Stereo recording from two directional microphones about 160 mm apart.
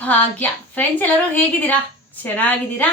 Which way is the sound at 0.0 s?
10° left (ahead or behind).